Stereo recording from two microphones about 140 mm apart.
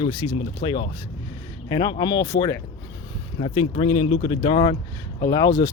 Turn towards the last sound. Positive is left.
turn(degrees=25)  # may be behind; listen again after turning